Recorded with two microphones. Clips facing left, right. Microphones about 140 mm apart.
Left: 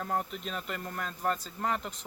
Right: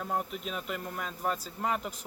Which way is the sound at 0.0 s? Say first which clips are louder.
Even; 5° right (ahead or behind).